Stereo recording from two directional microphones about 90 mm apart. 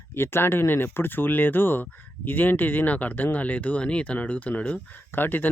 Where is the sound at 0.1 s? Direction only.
25° left (ahead or behind).